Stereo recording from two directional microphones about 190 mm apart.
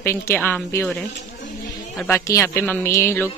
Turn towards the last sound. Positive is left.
turn(degrees=15)  # may be behind; listen again after turning